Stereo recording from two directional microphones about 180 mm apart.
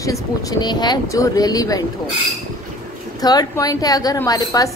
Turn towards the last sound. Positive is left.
turn(degrees=20)  # may be behind; listen again after turning